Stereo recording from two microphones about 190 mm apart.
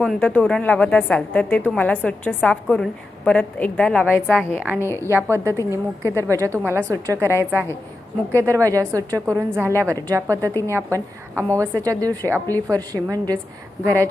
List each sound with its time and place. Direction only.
0.0 s a woman's voice: 5° left (ahead or behind)
5.1 s a woman's voice: 15° right (ahead or behind)